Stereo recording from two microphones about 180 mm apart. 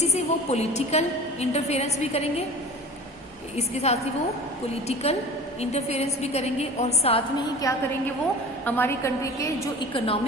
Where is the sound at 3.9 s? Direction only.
35° left (ahead or behind).